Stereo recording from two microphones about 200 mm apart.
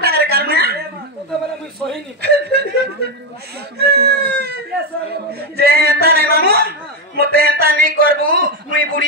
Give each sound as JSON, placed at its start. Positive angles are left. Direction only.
{"t": 0.0, "sound": "a sound", "side_deg": -50}
{"t": 2.2, "sound": "chuckle", "side_deg": -55}
{"t": 3.7, "sound": "a man's voice", "side_deg": -50}